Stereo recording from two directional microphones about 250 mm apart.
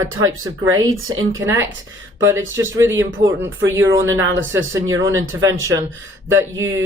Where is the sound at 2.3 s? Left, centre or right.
Centre.